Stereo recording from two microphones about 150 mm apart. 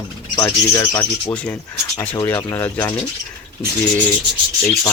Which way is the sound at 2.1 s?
20° left (ahead or behind).